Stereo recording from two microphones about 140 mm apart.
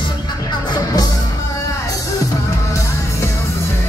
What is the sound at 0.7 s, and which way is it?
Music, 25° left (ahead or behind).